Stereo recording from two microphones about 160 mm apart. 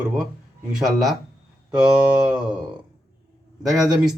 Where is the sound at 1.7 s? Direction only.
25° right (ahead or behind).